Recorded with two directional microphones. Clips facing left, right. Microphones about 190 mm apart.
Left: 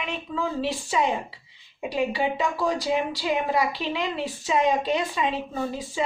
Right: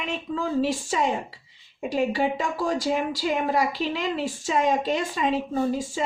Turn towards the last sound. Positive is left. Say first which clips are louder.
# right 4 dB
turn(degrees=-45)  # may be behind; listen again after turning